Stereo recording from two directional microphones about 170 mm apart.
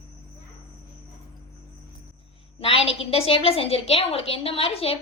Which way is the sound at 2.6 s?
35° left (ahead or behind).